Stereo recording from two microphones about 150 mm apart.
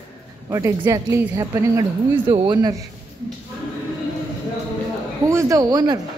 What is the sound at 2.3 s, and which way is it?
Speech, 35° right (ahead or behind).